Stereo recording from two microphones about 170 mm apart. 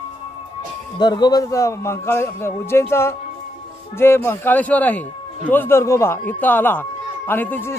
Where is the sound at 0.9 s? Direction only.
25° left (ahead or behind).